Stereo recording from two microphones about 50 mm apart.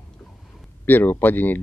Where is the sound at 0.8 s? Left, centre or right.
Left.